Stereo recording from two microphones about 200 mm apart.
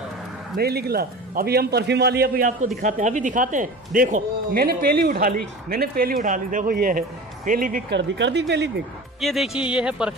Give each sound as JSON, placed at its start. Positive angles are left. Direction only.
{"t": 0.6, "sound": "speech", "side_deg": -50}
{"t": 7.9, "sound": "speech", "side_deg": -60}
{"t": 9.2, "sound": "speech", "side_deg": 0}